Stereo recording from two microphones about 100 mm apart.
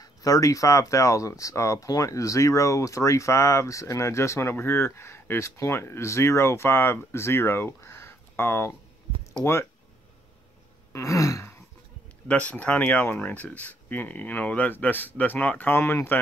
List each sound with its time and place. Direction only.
0.0 s speech: 35° left (ahead or behind)
10.9 s a sound: 30° left (ahead or behind)
12.3 s speech: 15° left (ahead or behind)